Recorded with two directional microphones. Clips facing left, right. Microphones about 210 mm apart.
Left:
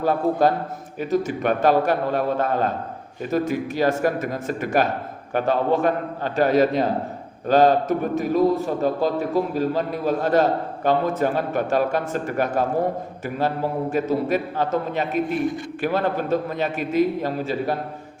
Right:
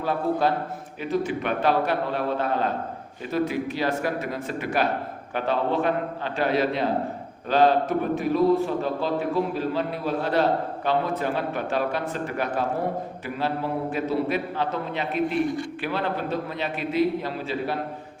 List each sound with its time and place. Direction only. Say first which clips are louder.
0.0 s a man's voice: left 4 dB; 45° left (ahead or behind)